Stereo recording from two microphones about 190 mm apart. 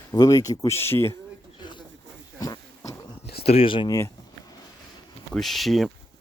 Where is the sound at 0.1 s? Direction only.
20° left (ahead or behind).